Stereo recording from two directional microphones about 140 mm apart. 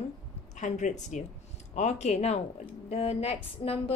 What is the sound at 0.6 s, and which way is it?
A woman's voice, 60° left (ahead or behind).